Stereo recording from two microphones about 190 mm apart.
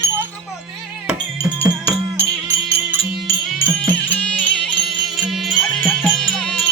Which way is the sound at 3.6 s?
10° left (ahead or behind).